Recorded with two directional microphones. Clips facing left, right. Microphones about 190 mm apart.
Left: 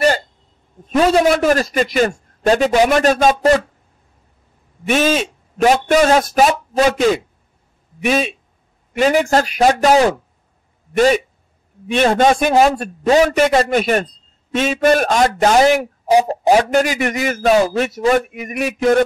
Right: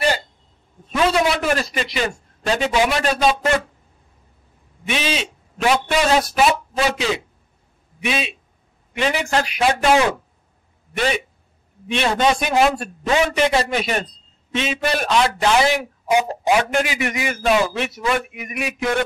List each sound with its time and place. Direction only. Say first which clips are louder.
0.9 s a man's voice: left 5 dB; 40° left (ahead or behind)
4.8 s a man's voice: left 8 dB; 45° left (ahead or behind)
11.9 s a man's voice: left 5 dB; 45° left (ahead or behind)